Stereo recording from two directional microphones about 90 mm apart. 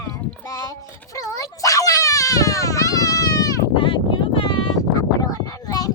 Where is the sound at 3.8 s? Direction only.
75° left (ahead or behind).